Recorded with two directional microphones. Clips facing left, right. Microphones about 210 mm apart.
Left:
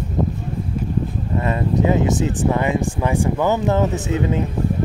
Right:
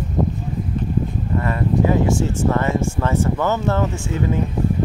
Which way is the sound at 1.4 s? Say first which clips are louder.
Even; 20° left (ahead or behind).